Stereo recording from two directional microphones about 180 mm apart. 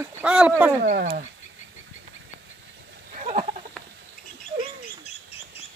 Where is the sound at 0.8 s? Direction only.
45° right (ahead or behind).